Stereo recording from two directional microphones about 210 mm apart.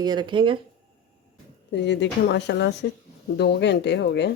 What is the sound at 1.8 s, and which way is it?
A woman's voice, 55° left (ahead or behind).